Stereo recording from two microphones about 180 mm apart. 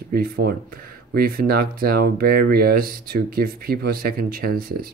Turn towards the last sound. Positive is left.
turn(degrees=-55)  # may be behind; listen again after turning